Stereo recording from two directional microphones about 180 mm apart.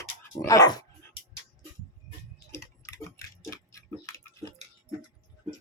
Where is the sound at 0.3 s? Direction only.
20° left (ahead or behind).